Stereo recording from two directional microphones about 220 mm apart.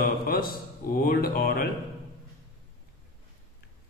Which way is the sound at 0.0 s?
40° left (ahead or behind).